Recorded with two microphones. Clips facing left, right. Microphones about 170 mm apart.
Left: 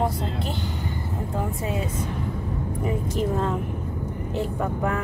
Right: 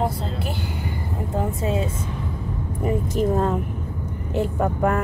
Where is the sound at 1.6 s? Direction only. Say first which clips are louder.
Right 4 dB; 25° right (ahead or behind).